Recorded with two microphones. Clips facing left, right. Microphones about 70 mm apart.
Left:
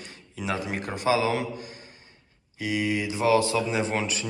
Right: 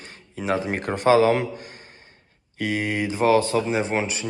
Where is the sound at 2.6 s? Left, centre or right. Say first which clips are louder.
Right 2 dB; right.